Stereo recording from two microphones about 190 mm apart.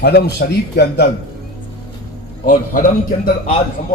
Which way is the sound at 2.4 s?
45° left (ahead or behind).